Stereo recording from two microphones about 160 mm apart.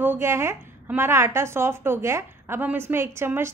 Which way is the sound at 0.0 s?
15° right (ahead or behind).